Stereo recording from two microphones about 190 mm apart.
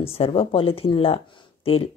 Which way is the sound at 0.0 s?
30° left (ahead or behind).